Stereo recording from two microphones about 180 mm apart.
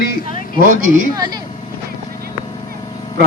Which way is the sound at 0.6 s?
50° right (ahead or behind).